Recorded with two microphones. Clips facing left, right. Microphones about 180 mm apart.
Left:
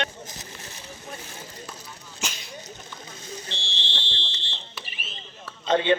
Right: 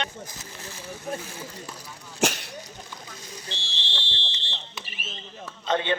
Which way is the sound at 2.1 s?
75° right (ahead or behind).